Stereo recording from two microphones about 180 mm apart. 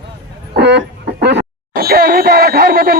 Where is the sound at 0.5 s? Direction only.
70° right (ahead or behind).